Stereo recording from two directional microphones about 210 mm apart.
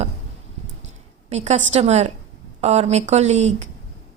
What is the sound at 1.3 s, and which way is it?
Speech, 35° right (ahead or behind).